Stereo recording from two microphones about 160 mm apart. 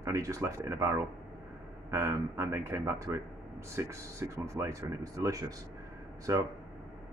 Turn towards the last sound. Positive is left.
turn(degrees=-20)  # may be behind; listen again after turning